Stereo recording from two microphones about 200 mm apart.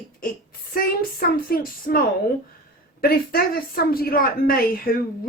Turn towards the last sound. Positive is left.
turn(degrees=50)  # may be behind; listen again after turning